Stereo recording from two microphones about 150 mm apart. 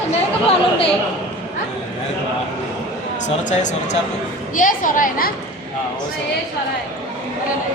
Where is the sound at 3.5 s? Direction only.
55° left (ahead or behind).